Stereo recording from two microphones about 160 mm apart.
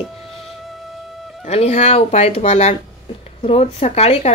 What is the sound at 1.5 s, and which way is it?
A woman's voice, 45° left (ahead or behind).